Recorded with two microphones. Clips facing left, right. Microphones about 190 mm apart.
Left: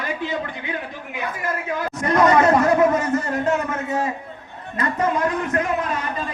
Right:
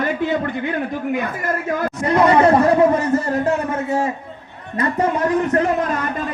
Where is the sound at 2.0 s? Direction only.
30° right (ahead or behind).